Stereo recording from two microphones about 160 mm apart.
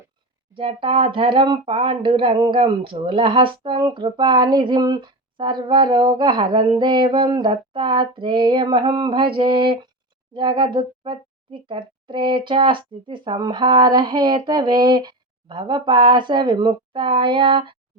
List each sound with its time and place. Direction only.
0.5 s speech: 35° right (ahead or behind)